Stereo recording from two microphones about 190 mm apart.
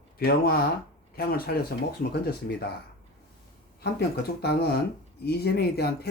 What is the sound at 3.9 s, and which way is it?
Speech, 55° left (ahead or behind).